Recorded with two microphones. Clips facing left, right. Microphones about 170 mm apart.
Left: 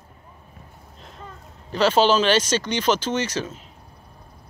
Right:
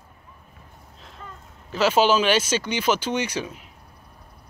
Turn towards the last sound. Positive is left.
turn(degrees=-10)  # may be behind; listen again after turning